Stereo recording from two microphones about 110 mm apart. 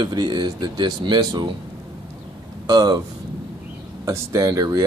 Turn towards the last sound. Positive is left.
turn(degrees=-30)  # may be behind; listen again after turning